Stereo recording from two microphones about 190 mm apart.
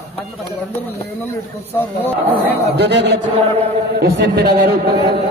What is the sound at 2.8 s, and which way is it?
Speech, 65° right (ahead or behind).